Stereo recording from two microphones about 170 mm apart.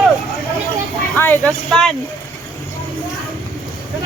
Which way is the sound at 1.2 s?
10° left (ahead or behind).